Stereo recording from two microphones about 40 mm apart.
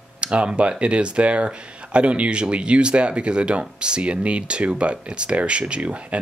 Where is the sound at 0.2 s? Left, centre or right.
Right.